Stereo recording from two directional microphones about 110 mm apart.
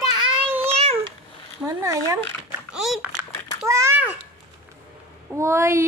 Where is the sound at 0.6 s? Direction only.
65° right (ahead or behind).